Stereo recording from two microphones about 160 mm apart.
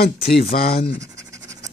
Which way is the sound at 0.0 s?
70° left (ahead or behind).